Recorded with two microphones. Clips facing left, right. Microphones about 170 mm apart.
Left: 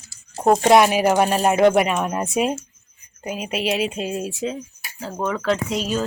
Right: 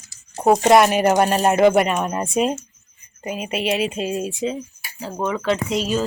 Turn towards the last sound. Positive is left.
turn(degrees=0)  # may be behind; listen again after turning